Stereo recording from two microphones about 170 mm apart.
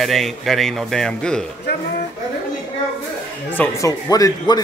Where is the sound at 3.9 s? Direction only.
20° left (ahead or behind).